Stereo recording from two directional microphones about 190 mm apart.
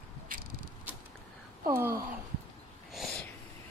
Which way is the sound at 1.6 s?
10° right (ahead or behind).